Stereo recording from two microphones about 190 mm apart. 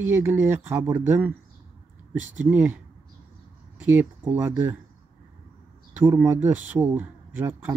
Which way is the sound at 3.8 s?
10° right (ahead or behind).